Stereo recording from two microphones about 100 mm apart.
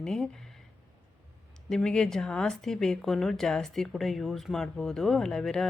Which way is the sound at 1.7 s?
5° left (ahead or behind).